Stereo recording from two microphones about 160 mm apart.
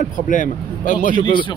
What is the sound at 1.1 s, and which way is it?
Speech, 30° left (ahead or behind).